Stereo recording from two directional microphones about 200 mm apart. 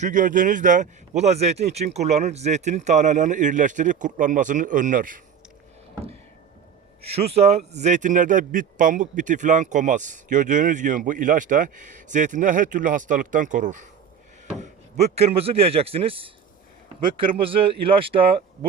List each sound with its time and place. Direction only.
0.0 s a man's voice: 40° right (ahead or behind)
7.0 s a man's voice: 30° right (ahead or behind)